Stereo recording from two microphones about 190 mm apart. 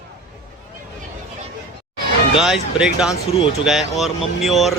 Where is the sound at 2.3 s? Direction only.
5° right (ahead or behind).